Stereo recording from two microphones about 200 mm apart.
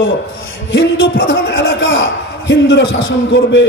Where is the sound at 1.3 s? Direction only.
60° left (ahead or behind).